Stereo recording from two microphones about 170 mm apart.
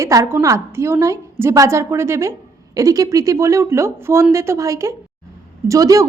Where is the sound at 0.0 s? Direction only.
20° right (ahead or behind).